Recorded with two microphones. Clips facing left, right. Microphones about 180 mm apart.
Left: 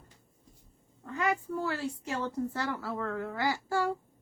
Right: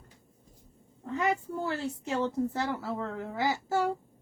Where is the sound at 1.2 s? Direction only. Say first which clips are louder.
Even; 25° right (ahead or behind).